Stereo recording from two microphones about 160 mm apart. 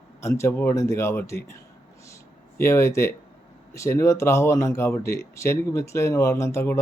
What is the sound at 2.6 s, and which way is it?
Speech, 15° left (ahead or behind).